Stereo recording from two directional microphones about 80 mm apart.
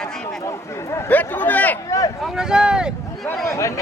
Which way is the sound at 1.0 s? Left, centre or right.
Left.